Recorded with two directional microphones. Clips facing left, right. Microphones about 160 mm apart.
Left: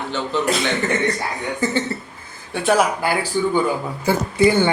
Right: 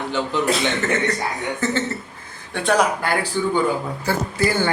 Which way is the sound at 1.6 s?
15° left (ahead or behind).